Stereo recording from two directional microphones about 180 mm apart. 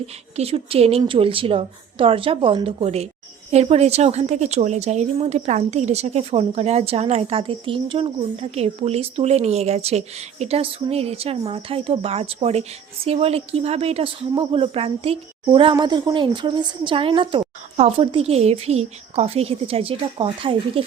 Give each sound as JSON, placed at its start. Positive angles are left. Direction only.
{"t": 0.3, "sound": "a woman's voice", "side_deg": -35}